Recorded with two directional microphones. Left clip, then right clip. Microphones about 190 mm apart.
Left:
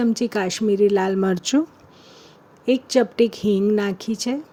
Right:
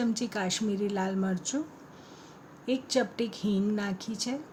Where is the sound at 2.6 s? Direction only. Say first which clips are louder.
Left 10 dB; 40° left (ahead or behind).